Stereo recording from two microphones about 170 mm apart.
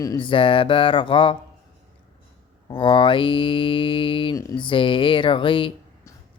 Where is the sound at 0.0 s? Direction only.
25° left (ahead or behind).